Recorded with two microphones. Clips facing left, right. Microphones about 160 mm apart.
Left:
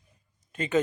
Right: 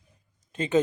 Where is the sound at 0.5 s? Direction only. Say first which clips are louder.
Right 3 dB; 25° right (ahead or behind).